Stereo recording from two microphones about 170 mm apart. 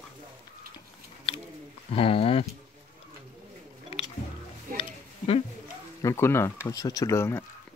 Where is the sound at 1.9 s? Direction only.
35° left (ahead or behind).